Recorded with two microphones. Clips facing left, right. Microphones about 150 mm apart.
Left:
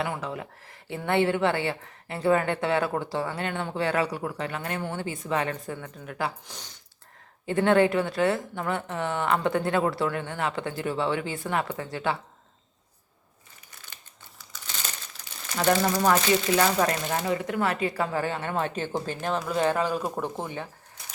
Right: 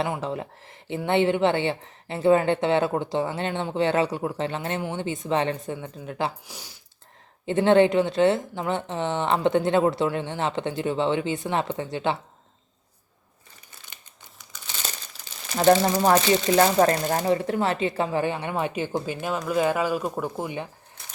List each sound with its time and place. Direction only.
0.2 s a woman's voice: 25° right (ahead or behind)
6.5 s speech: 10° right (ahead or behind)
7.4 s a woman's voice: 25° right (ahead or behind)
15.5 s a woman's voice: 30° right (ahead or behind); by 20.7 s 10° right (ahead or behind)